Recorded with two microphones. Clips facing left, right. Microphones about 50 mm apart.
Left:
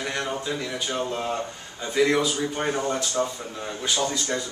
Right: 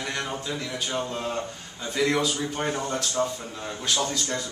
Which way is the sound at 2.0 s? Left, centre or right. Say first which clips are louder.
Left 3 dB; centre.